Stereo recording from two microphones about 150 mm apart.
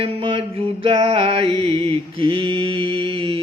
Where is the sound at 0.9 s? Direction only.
40° right (ahead or behind).